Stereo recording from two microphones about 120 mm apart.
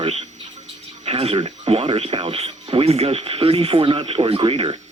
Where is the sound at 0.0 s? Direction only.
65° right (ahead or behind).